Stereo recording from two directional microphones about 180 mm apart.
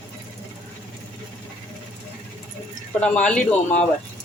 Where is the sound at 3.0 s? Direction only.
5° left (ahead or behind).